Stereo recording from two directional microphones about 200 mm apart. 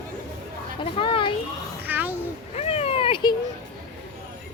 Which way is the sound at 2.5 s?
30° left (ahead or behind).